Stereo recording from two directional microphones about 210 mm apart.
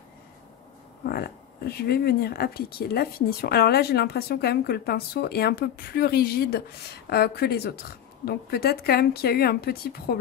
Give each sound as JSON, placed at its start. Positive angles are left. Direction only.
{"t": 1.0, "sound": "speech", "side_deg": 50}